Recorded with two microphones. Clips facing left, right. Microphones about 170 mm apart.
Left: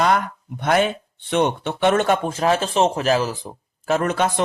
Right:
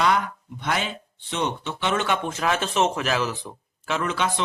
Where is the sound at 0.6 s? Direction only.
50° left (ahead or behind).